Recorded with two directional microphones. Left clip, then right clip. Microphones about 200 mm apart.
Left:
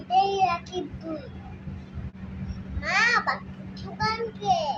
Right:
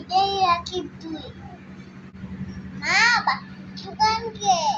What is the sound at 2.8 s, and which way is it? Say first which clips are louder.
A child's voice: right 4 dB; 10° left (ahead or behind).